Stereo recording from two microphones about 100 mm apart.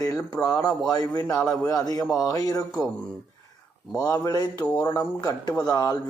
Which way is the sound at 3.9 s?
35° left (ahead or behind).